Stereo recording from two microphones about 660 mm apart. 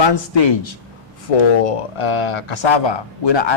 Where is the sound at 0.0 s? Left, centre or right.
Left.